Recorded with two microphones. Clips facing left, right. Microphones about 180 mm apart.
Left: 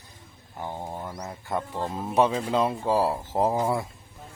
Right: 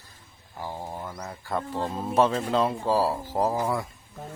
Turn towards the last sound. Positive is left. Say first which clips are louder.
# left 1 dB
turn(degrees=25)  # may be behind; listen again after turning